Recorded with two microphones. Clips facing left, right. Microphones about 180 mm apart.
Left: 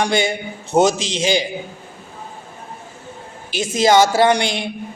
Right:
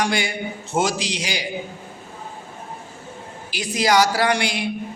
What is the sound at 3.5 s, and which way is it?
A man's voice, 25° left (ahead or behind).